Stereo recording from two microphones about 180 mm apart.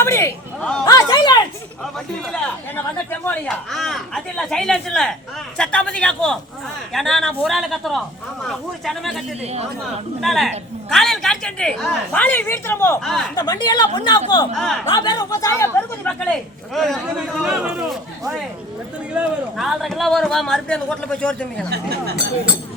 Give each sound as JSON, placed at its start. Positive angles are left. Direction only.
{"t": 0.0, "sound": "a sound", "side_deg": 15}
{"t": 2.2, "sound": "speech", "side_deg": 10}
{"t": 9.4, "sound": "a woman's voice", "side_deg": -35}
{"t": 10.2, "sound": "speech", "side_deg": 0}
{"t": 13.1, "sound": "speech", "side_deg": 0}
{"t": 13.3, "sound": "speech", "side_deg": 20}
{"t": 14.5, "sound": "speech", "side_deg": 0}
{"t": 14.9, "sound": "speech", "side_deg": 20}
{"t": 16.7, "sound": "speech", "side_deg": 0}
{"t": 21.7, "sound": "speech", "side_deg": -65}